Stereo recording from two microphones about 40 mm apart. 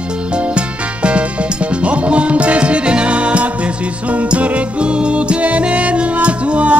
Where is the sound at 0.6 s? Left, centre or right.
Right.